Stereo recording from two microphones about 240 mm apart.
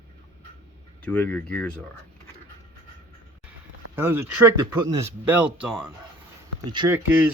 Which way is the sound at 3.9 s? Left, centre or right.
Centre.